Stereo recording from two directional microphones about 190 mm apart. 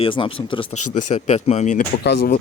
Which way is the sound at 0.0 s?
25° left (ahead or behind).